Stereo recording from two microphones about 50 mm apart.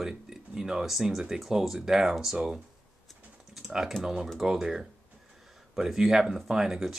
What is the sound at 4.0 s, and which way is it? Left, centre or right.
Speech, centre.